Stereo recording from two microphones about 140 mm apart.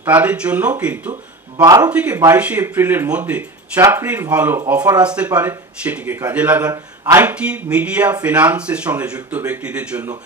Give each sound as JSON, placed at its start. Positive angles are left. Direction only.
{"t": 0.0, "sound": "speech", "side_deg": -10}
{"t": 6.7, "sound": "speech", "side_deg": -20}
{"t": 7.2, "sound": "speech", "side_deg": -10}